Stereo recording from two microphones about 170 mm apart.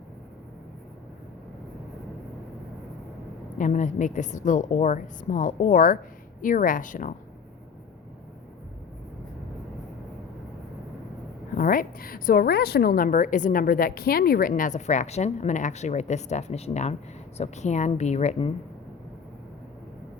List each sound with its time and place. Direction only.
3.6 s a woman's voice: 45° left (ahead or behind)
11.5 s a woman's voice: 55° left (ahead or behind); by 18.5 s 35° left (ahead or behind)